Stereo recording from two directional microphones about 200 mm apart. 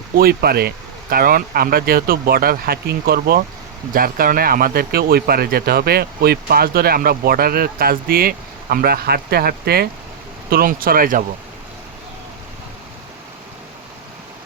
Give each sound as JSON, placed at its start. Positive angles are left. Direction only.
{"t": 0.2, "sound": "speech", "side_deg": -50}